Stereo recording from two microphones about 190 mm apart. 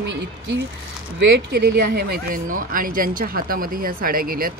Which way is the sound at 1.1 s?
65° right (ahead or behind).